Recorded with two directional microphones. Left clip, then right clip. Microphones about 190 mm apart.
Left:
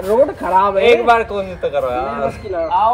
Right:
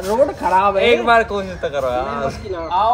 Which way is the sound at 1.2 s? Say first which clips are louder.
Left 1 dB; 35° right (ahead or behind).